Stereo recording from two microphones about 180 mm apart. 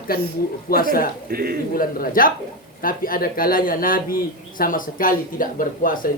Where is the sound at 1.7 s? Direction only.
55° left (ahead or behind).